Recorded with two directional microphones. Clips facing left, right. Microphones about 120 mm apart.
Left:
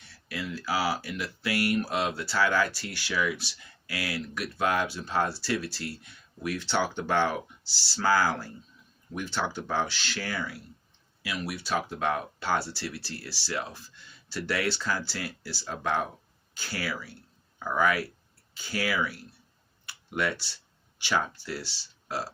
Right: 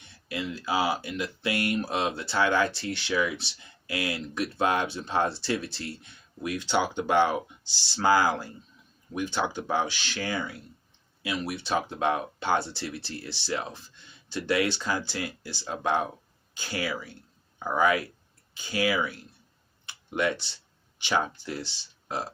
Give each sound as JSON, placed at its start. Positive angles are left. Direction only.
{"t": 0.0, "sound": "speech", "side_deg": -20}
{"t": 19.8, "sound": "tick-tock", "side_deg": -20}
{"t": 21.0, "sound": "speech", "side_deg": -20}